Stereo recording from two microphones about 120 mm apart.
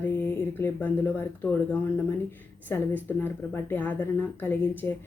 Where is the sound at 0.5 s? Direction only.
20° left (ahead or behind).